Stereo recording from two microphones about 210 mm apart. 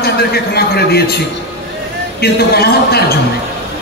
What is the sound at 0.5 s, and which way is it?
Speech, 50° left (ahead or behind).